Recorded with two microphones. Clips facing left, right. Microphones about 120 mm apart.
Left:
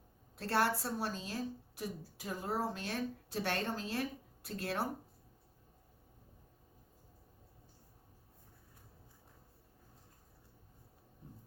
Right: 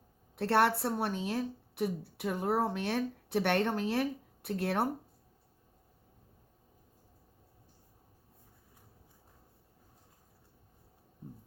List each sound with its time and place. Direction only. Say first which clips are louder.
0.3 s speech: right 6 dB; 65° right (ahead or behind)